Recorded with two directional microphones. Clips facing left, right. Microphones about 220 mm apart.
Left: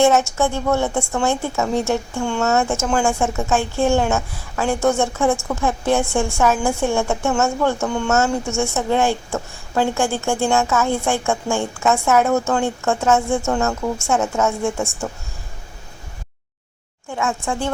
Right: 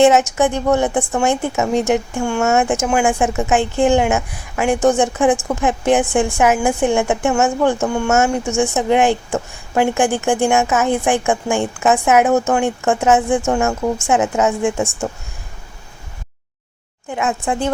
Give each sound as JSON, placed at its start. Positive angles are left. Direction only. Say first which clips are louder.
{"t": 0.0, "sound": "a woman's voice", "louder": "right 3 dB", "side_deg": -20}
{"t": 17.1, "sound": "speech", "louder": "right 3 dB", "side_deg": -20}